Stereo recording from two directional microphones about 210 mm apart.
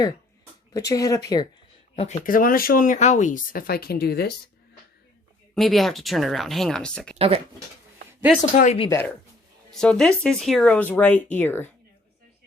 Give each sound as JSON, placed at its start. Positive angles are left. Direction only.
{"t": 0.7, "sound": "speech", "side_deg": 15}
{"t": 2.0, "sound": "speech", "side_deg": 35}
{"t": 5.5, "sound": "speech", "side_deg": 0}
{"t": 7.2, "sound": "speech", "side_deg": -30}
{"t": 8.5, "sound": "speech", "side_deg": 30}
{"t": 8.9, "sound": "speech", "side_deg": 10}